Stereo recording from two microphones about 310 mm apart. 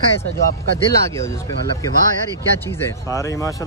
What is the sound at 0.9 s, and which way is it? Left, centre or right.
Speech, centre.